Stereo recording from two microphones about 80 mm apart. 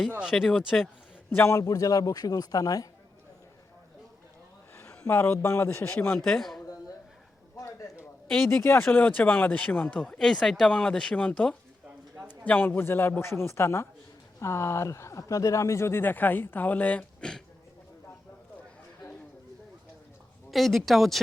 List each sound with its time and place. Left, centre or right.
0.2 s speech: centre
1.4 s a man's voice: left
4.8 s a man's voice: left
6.1 s speech: centre
7.5 s a sound: left
8.6 s speech: left
10.0 s speech: centre
12.5 s speech: left
20.5 s speech: centre